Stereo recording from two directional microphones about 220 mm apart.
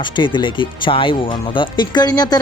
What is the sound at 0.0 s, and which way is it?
Speech, 20° left (ahead or behind).